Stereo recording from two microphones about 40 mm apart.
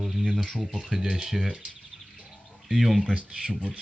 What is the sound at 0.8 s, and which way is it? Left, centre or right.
Speech, centre.